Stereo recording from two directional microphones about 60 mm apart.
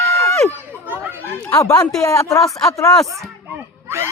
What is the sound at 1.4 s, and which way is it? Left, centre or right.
Speech, left.